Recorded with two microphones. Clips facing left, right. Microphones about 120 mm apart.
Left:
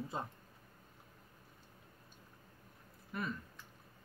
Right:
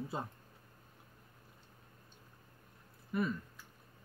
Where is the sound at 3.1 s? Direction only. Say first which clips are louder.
Right 7 dB; 5° right (ahead or behind).